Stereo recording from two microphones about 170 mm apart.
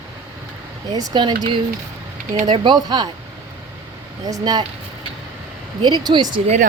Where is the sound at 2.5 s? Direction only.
30° right (ahead or behind).